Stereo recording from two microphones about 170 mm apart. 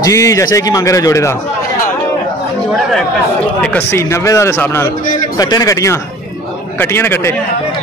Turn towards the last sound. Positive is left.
turn(degrees=15)  # may be behind; listen again after turning